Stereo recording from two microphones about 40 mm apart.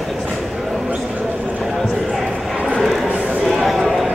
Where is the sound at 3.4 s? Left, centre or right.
Centre.